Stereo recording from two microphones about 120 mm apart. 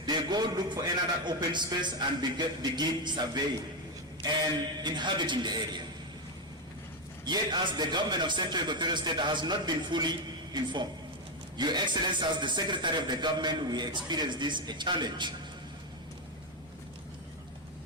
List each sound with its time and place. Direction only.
0.0 s a man's voice: 35° right (ahead or behind)
4.8 s a man's voice: 40° right (ahead or behind)
7.3 s a man's voice: 40° right (ahead or behind)